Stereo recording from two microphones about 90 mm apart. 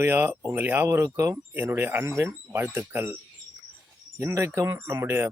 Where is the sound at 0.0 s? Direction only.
20° right (ahead or behind).